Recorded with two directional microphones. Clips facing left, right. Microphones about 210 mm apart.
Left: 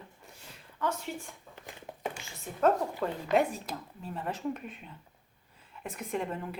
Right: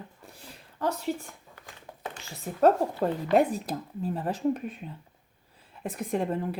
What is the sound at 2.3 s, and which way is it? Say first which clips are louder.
Speech: right 5 dB; 35° right (ahead or behind).